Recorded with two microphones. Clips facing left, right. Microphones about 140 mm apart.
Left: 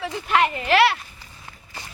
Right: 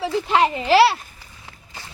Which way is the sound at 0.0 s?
30° right (ahead or behind).